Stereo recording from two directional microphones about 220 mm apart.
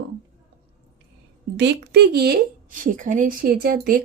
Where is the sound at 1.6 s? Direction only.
45° right (ahead or behind).